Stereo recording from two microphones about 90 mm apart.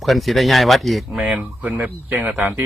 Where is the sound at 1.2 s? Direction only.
15° right (ahead or behind).